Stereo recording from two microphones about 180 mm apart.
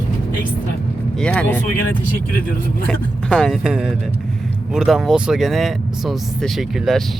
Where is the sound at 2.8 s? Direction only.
5° left (ahead or behind).